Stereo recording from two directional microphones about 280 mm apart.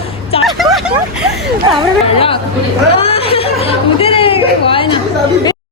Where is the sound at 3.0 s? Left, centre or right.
Centre.